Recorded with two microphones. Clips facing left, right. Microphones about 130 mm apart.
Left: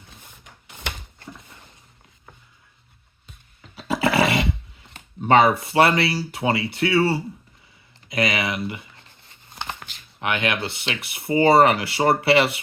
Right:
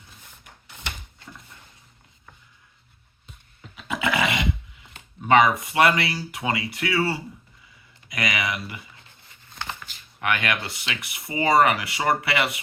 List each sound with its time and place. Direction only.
3.8 s roar: 35° left (ahead or behind)
5.2 s speech: 30° left (ahead or behind)
10.2 s speech: 25° left (ahead or behind)